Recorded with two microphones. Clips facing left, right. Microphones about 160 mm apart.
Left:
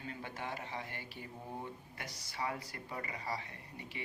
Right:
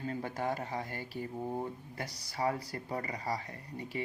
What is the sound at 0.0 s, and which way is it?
Speech, 40° right (ahead or behind).